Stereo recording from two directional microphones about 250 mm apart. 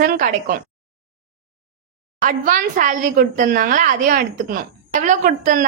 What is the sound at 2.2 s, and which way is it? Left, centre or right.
A woman's voice, right.